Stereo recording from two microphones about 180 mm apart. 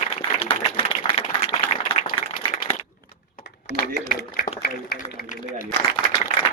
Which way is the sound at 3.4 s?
60° left (ahead or behind).